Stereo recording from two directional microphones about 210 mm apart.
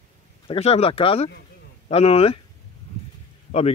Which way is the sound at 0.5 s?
30° left (ahead or behind).